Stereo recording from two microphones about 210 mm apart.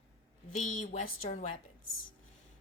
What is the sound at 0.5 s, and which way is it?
A woman's voice, 35° left (ahead or behind).